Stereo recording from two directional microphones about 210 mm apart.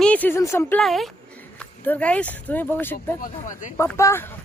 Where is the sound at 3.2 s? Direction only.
40° left (ahead or behind).